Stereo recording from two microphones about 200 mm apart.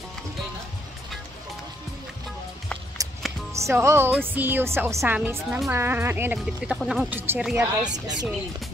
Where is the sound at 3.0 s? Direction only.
15° right (ahead or behind).